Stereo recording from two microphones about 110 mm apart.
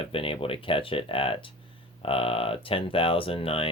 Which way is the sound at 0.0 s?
55° left (ahead or behind).